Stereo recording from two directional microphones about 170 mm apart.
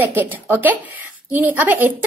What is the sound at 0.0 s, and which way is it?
A woman's voice, 10° right (ahead or behind).